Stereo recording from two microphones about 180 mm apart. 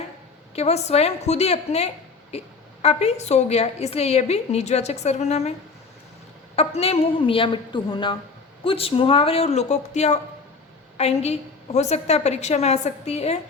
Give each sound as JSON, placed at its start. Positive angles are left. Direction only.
{"t": 0.5, "sound": "a woman's voice", "side_deg": 35}
{"t": 6.6, "sound": "a woman's voice", "side_deg": 35}